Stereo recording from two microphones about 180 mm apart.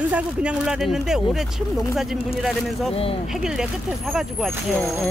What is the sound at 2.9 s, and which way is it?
Speech, 30° left (ahead or behind).